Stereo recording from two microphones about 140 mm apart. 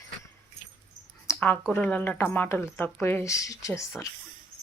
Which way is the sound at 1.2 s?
15° left (ahead or behind).